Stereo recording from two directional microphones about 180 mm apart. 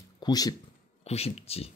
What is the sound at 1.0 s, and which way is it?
Speech, 35° left (ahead or behind).